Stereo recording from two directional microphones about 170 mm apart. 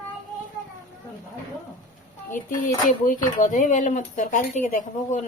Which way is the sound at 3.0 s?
50° left (ahead or behind).